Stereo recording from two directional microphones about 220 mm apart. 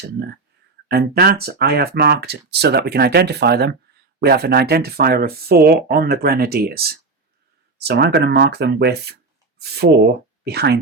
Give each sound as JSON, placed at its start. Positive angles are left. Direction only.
{"t": 0.9, "sound": "speech", "side_deg": -45}